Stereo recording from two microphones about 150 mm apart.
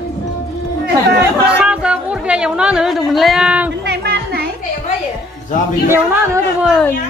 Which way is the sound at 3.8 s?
90° right.